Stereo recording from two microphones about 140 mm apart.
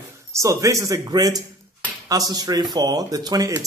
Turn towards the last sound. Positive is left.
turn(degrees=-25)  # may be behind; listen again after turning